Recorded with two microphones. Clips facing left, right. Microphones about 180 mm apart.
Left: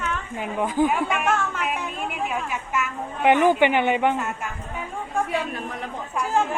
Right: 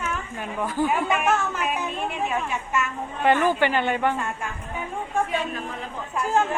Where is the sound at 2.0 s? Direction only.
10° left (ahead or behind).